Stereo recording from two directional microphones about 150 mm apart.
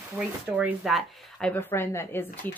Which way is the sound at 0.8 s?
Centre (ahead or behind).